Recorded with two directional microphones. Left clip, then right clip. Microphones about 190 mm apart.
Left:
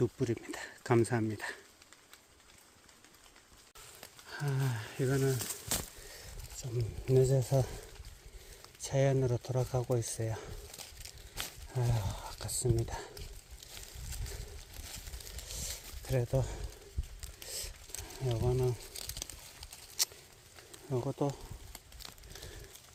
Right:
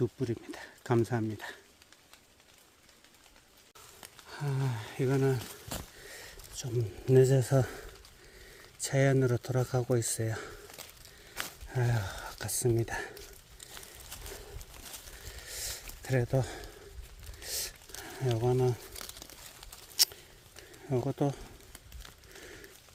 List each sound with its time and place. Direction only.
0.0 s speech: centre (ahead or behind)
4.3 s speech: centre (ahead or behind); by 5.4 s 20° right (ahead or behind)
5.4 s a sound: 40° left (ahead or behind)
7.1 s speech: 40° right (ahead or behind)
8.8 s speech: 35° right (ahead or behind)
11.3 s a sound: 35° right (ahead or behind)
12.8 s speech: 35° right (ahead or behind)
15.5 s a sound: 35° right (ahead or behind)
18.0 s speech: 35° right (ahead or behind)
20.9 s speech: 35° right (ahead or behind)